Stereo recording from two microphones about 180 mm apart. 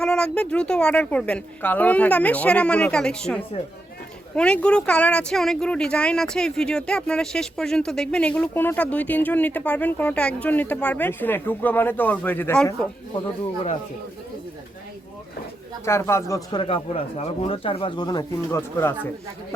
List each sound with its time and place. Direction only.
0.0 s speech: 5° left (ahead or behind)
15.8 s speech: 15° left (ahead or behind)